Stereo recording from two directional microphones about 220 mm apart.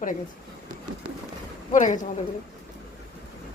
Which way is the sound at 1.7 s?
35° left (ahead or behind).